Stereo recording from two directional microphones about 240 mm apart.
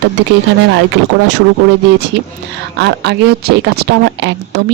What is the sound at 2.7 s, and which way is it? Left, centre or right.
Speech, right.